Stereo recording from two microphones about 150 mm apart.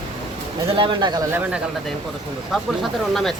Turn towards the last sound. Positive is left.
turn(degrees=0)  # may be behind; listen again after turning